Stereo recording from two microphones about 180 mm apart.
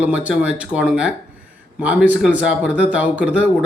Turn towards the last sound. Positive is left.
turn(degrees=-5)  # may be behind; listen again after turning